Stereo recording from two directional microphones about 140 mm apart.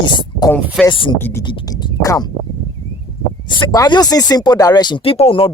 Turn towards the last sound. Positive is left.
turn(degrees=40)  # may be behind; listen again after turning